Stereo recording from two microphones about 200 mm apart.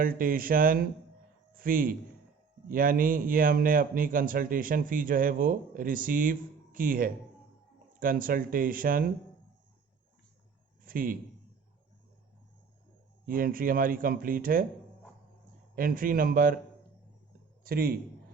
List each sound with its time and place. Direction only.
0.0 s a man's voice: 45° right (ahead or behind)
10.8 s a man's voice: 45° right (ahead or behind)
13.2 s a man's voice: 45° right (ahead or behind)
15.7 s a man's voice: 45° right (ahead or behind)
17.6 s a man's voice: 50° right (ahead or behind)